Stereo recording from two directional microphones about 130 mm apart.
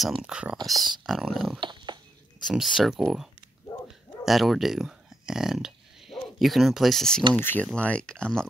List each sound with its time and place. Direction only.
0.2 s speech: 10° right (ahead or behind)
1.6 s dog: 35° right (ahead or behind)
2.4 s speech: centre (ahead or behind)
4.3 s speech: centre (ahead or behind)
7.3 s speech: 15° left (ahead or behind)